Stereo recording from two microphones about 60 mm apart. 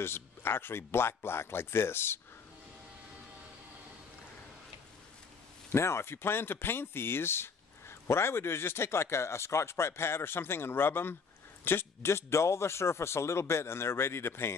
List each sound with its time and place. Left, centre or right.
0.0 s speech: left
5.7 s speech: left